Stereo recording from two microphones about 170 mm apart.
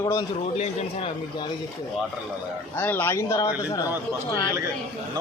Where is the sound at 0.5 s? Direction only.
35° left (ahead or behind).